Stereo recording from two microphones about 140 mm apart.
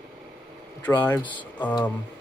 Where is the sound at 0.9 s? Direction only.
30° left (ahead or behind).